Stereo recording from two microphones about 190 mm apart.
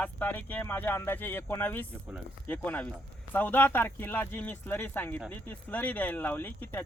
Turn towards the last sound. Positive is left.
turn(degrees=10)  # may be behind; listen again after turning